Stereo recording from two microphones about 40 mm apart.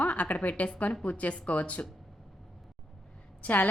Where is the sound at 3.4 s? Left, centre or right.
Left.